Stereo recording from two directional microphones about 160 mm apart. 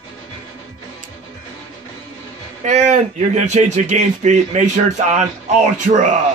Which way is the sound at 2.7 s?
45° right (ahead or behind).